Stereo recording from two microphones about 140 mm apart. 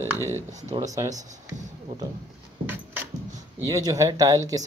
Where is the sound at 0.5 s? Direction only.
55° right (ahead or behind).